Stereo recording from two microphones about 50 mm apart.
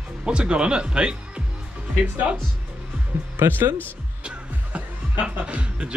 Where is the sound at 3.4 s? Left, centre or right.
Right.